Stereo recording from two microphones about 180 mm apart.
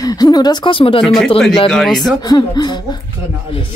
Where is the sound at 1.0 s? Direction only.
Centre (ahead or behind).